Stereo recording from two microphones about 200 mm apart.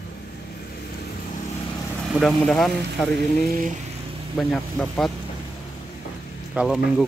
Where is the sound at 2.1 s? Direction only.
5° left (ahead or behind).